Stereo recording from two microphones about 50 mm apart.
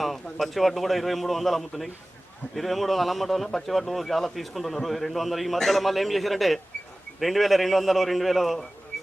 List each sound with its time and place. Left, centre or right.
0.0 s a man's voice: centre